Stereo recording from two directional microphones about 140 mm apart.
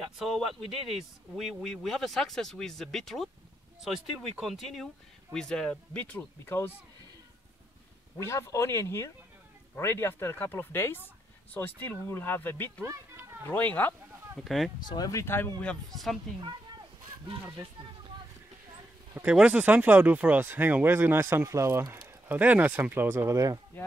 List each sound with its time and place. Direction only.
0.8 s speech: centre (ahead or behind); by 6.7 s 15° left (ahead or behind)
8.2 s speech: 20° left (ahead or behind)
12.8 s a sound: 20° right (ahead or behind)
13.5 s speech: 10° left (ahead or behind)
14.3 s speech: centre (ahead or behind)
14.9 s speech: 25° left (ahead or behind); by 16.2 s centre (ahead or behind)
19.1 s speech: 10° right (ahead or behind); by 23.6 s 25° right (ahead or behind)